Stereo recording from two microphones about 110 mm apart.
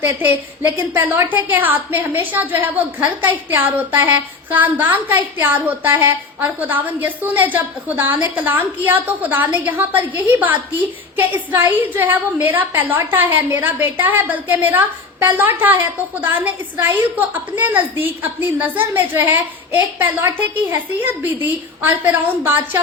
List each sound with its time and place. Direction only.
0.0 s a woman's voice: 15° right (ahead or behind)